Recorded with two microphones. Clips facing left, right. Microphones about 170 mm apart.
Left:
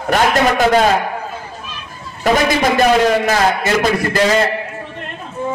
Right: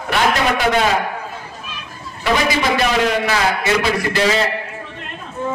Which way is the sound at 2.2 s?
45° left (ahead or behind).